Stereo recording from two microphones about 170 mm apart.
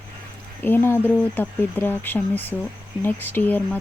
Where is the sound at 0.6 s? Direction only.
15° left (ahead or behind).